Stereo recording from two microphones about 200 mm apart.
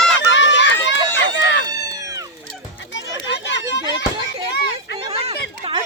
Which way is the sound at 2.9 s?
65° left (ahead or behind).